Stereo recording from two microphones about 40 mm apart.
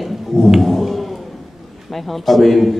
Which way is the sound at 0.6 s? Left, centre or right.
Centre.